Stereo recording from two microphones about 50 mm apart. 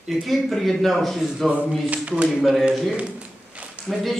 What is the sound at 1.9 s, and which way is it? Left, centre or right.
Speech, right.